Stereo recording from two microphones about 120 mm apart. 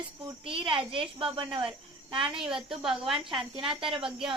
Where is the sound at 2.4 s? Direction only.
5° right (ahead or behind).